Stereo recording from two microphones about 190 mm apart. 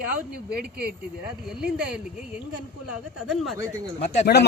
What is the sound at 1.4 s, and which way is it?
Speech, 5° right (ahead or behind).